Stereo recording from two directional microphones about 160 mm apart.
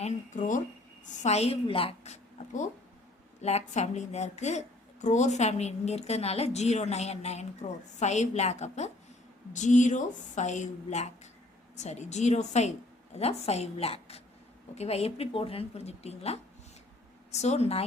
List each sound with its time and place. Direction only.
0.0 s a sound: 50° left (ahead or behind)
1.0 s speech: 45° left (ahead or behind)
3.4 s a woman's voice: 45° left (ahead or behind)